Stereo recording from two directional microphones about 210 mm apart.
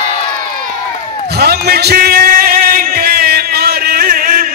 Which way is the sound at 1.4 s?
50° right (ahead or behind).